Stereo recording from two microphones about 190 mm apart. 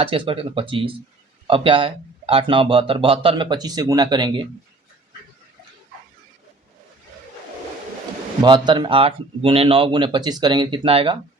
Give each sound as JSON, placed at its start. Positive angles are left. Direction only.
{"t": 0.0, "sound": "speech", "side_deg": -30}
{"t": 8.4, "sound": "speech", "side_deg": -25}